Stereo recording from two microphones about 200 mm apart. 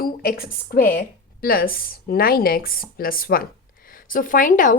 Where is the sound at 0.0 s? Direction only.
50° left (ahead or behind).